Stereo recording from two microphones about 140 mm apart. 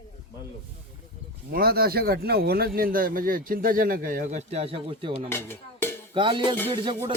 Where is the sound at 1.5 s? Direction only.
90° right; by 5.1 s 40° right (ahead or behind).